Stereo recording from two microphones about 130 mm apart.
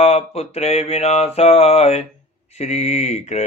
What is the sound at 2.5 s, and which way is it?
Speech, 55° left (ahead or behind).